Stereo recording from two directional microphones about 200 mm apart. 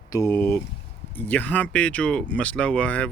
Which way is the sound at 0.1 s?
15° left (ahead or behind).